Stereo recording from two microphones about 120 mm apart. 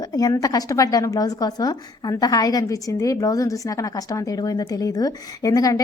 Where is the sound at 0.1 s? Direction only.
30° left (ahead or behind).